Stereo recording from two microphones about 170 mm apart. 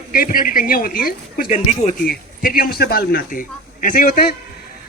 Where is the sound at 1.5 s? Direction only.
40° left (ahead or behind).